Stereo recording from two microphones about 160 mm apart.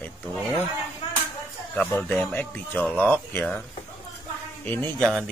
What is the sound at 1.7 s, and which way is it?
Speech, 10° left (ahead or behind).